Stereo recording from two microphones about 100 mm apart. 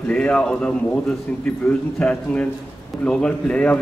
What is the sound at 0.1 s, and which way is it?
Speech, 10° left (ahead or behind).